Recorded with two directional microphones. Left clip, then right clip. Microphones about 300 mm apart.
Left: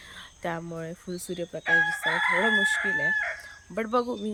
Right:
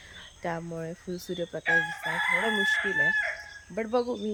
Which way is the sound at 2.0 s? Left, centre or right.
Right.